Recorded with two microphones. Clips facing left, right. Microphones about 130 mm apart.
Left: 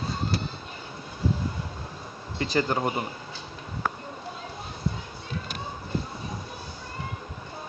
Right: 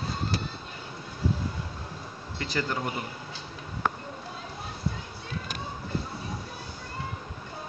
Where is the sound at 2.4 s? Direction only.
20° left (ahead or behind).